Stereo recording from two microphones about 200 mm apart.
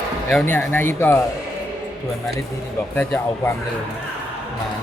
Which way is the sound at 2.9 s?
10° left (ahead or behind).